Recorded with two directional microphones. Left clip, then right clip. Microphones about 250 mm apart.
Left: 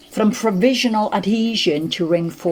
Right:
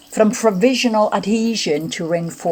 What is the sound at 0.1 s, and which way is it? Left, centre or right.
Speech, right.